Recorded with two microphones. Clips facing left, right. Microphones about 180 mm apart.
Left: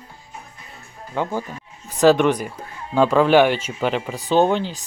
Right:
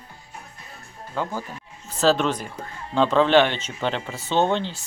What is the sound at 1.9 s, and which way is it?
Speech, 15° left (ahead or behind).